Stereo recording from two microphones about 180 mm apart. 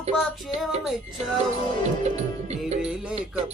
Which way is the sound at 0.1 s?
Centre (ahead or behind).